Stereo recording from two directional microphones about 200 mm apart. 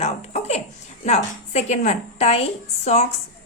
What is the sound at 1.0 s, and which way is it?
A woman's voice, 35° left (ahead or behind).